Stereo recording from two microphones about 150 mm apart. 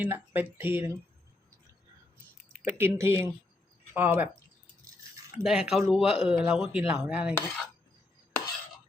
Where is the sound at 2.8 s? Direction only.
15° right (ahead or behind).